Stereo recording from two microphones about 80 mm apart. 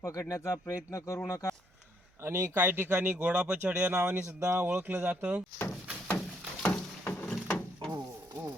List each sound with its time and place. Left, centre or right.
0.0 s speech: left
2.2 s speech: right
4.4 s speech: right
5.5 s door: left
7.0 s wood: left
7.3 s wood: centre